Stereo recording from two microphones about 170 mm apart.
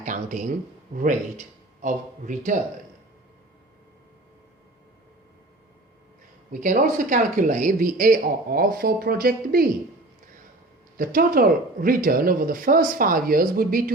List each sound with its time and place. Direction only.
0.0 s a sound: 50° right (ahead or behind)
0.9 s speech: 45° right (ahead or behind)
6.5 s speech: 50° right (ahead or behind)
10.9 s speech: 55° right (ahead or behind)